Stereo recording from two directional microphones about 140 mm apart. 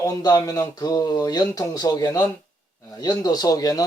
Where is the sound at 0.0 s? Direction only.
25° left (ahead or behind).